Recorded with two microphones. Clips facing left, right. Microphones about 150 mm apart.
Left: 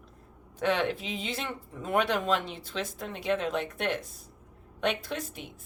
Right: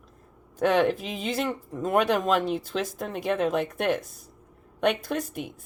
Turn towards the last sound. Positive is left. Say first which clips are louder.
# right 5 dB
turn(degrees=-50)  # may be behind; listen again after turning